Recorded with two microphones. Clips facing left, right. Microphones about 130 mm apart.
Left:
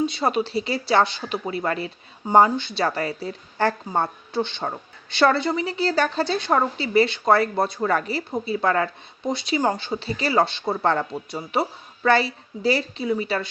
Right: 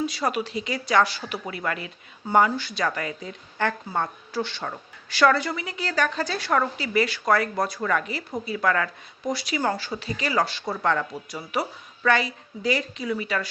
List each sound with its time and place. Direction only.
0.0 s a woman's voice: 25° left (ahead or behind)